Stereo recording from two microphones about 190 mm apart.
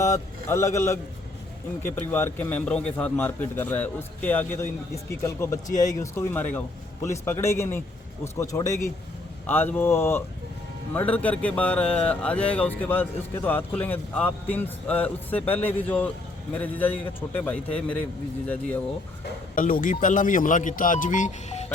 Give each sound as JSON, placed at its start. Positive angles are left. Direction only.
{"t": 0.0, "sound": "a man's voice", "side_deg": 15}
{"t": 19.5, "sound": "speech", "side_deg": 45}